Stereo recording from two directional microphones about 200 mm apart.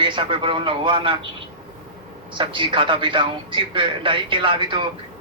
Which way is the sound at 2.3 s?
25° right (ahead or behind).